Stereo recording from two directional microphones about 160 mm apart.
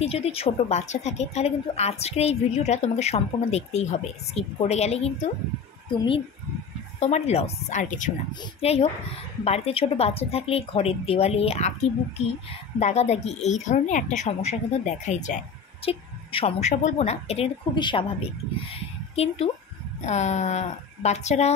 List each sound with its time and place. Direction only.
0.0 s a woman's voice: 40° left (ahead or behind)
7.0 s a woman's voice: 45° left (ahead or behind)
8.3 s a woman's voice: 25° left (ahead or behind)
8.6 s a woman's voice: 40° left (ahead or behind)